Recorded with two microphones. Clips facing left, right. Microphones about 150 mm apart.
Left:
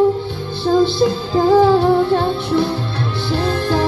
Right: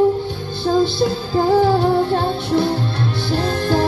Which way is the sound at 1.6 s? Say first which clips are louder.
Left 3 dB; 40° right (ahead or behind).